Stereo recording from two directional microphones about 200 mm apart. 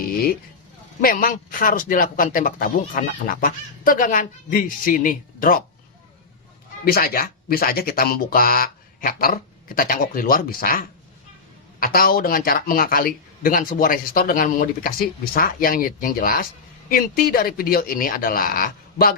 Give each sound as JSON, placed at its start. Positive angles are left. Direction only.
{"t": 1.0, "sound": "speech", "side_deg": 45}
{"t": 6.9, "sound": "speech", "side_deg": 45}
{"t": 11.8, "sound": "speech", "side_deg": 45}